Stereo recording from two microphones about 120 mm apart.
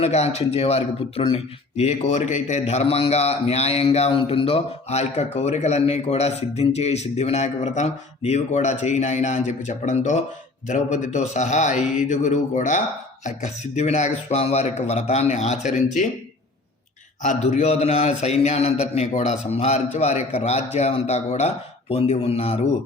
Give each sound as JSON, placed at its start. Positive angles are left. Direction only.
{"t": 0.0, "sound": "a man's voice", "side_deg": 65}
{"t": 1.8, "sound": "a man's voice", "side_deg": 65}
{"t": 13.2, "sound": "a man's voice", "side_deg": 75}
{"t": 17.2, "sound": "a man's voice", "side_deg": 75}